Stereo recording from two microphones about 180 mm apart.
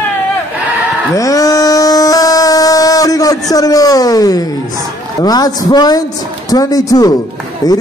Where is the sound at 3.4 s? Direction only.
20° left (ahead or behind).